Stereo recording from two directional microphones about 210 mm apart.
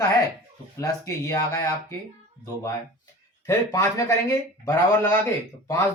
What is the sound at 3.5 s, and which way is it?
A man's voice, 15° left (ahead or behind).